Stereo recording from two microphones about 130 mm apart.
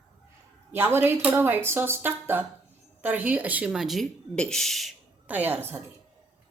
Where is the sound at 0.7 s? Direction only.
15° right (ahead or behind); by 4.9 s centre (ahead or behind).